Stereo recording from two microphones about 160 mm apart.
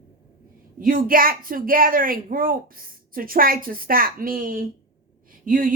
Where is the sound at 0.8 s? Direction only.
60° right (ahead or behind).